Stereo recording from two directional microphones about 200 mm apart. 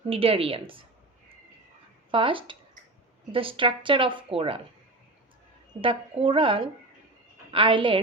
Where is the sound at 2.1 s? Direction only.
25° right (ahead or behind).